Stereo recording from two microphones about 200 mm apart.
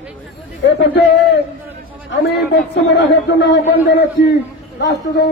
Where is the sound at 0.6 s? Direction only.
55° left (ahead or behind).